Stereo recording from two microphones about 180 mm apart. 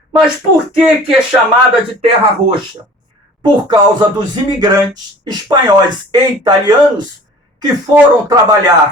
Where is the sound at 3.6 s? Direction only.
25° right (ahead or behind).